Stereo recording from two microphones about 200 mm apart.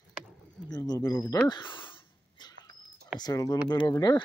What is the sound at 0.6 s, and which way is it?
Speech, 20° left (ahead or behind).